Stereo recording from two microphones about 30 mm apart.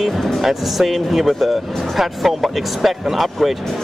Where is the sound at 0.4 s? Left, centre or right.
Centre.